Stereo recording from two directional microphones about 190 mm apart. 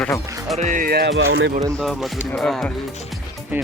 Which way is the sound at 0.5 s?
40° right (ahead or behind).